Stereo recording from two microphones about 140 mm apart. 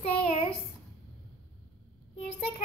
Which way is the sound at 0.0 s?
45° left (ahead or behind).